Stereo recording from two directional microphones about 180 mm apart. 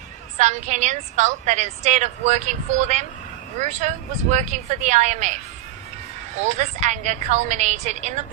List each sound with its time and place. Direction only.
0.3 s a woman's voice: 40° right (ahead or behind)
6.4 s a woman's voice: 40° right (ahead or behind)